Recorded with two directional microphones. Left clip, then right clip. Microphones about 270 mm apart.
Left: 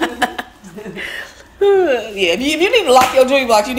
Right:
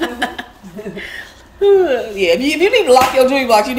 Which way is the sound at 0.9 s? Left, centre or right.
Centre.